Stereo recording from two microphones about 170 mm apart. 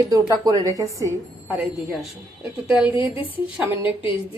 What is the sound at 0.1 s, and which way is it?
A woman's voice, 20° right (ahead or behind).